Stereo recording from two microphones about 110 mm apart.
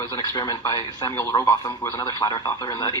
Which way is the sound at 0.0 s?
40° left (ahead or behind).